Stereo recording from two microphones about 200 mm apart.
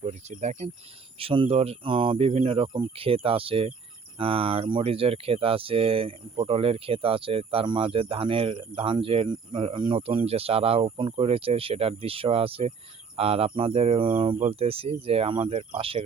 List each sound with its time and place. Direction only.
0.0 s speech: 35° right (ahead or behind)